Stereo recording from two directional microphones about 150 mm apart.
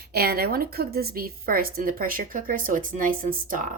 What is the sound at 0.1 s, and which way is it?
A woman's voice, 90° right.